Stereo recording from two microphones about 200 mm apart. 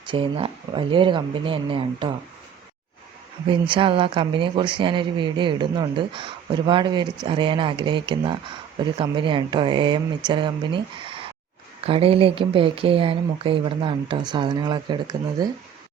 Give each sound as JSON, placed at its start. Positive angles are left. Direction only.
{"t": 0.0, "sound": "speech", "side_deg": -25}
{"t": 3.5, "sound": "speech", "side_deg": -25}